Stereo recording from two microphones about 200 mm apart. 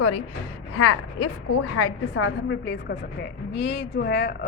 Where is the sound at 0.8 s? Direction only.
90° left.